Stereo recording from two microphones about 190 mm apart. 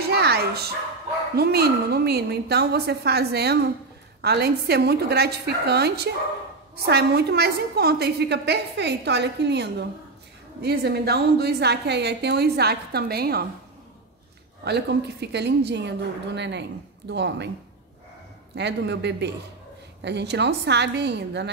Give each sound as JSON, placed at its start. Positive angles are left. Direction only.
{"t": 0.1, "sound": "bow-wow", "side_deg": -55}
{"t": 1.3, "sound": "a woman's voice", "side_deg": -55}
{"t": 14.6, "sound": "a woman's voice", "side_deg": -60}
{"t": 18.5, "sound": "a woman's voice", "side_deg": -65}